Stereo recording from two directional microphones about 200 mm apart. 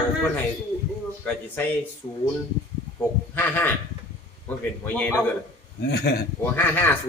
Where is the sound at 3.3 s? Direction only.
10° left (ahead or behind).